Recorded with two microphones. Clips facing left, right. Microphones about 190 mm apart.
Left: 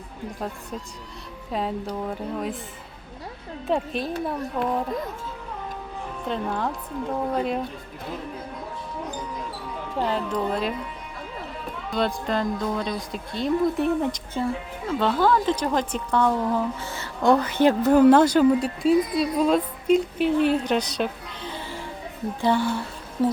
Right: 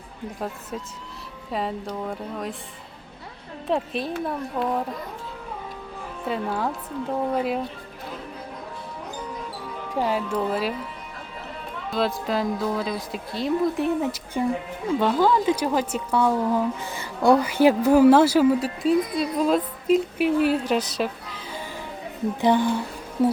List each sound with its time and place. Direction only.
1.5 s music: centre (ahead or behind)
1.9 s speech: 5° left (ahead or behind)
3.7 s speech: centre (ahead or behind)
6.2 s speech: 5° right (ahead or behind)
9.9 s speech: 10° right (ahead or behind)
11.9 s speech: centre (ahead or behind)
14.8 s speech: 10° right (ahead or behind)
22.4 s speech: 15° right (ahead or behind)